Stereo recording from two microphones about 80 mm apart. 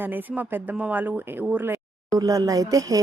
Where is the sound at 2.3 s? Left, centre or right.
Right.